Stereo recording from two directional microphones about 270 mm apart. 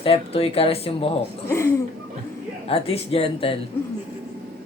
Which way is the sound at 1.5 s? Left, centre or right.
Centre.